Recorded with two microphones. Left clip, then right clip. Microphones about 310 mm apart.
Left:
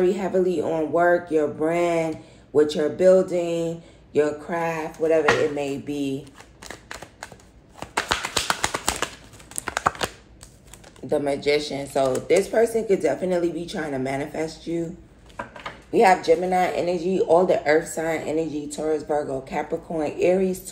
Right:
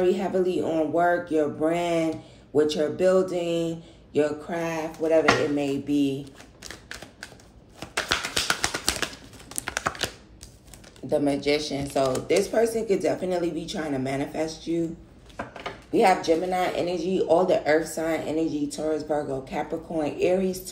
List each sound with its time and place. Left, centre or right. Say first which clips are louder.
0.0 s speech: left 2 dB; centre
7.8 s a sound: left 2 dB; centre
11.1 s speech: left 2 dB; centre
15.9 s speech: left 3 dB; centre